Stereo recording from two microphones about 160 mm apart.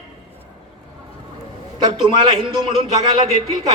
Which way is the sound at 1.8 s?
30° right (ahead or behind).